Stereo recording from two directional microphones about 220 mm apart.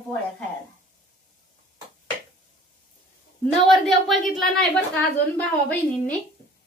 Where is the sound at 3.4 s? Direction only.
Centre (ahead or behind).